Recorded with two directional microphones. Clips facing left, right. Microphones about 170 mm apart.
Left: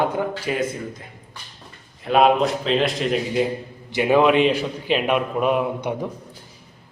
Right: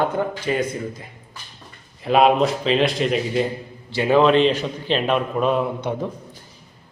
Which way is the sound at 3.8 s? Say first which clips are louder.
Right 1 dB; 15° left (ahead or behind).